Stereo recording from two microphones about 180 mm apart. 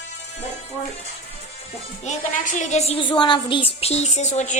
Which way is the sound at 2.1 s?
45° left (ahead or behind).